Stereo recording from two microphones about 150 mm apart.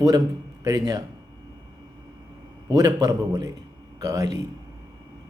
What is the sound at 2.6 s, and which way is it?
Speech, 25° right (ahead or behind).